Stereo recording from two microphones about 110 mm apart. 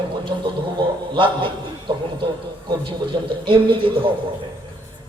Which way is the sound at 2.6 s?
45° right (ahead or behind).